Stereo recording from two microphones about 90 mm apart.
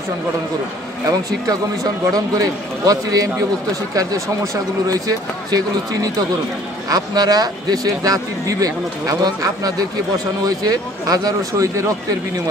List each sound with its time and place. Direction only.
1.5 s a man's voice: 40° right (ahead or behind)
6.9 s speech: 45° right (ahead or behind)